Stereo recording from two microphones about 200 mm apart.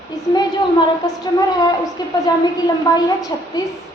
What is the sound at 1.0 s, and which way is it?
A woman's voice, 20° left (ahead or behind).